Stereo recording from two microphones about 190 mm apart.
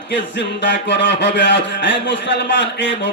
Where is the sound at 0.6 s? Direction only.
70° left (ahead or behind).